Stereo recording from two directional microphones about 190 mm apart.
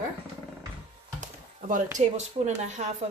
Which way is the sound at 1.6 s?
45° right (ahead or behind).